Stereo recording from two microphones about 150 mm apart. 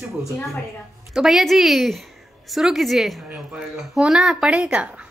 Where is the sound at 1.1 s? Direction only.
Centre (ahead or behind).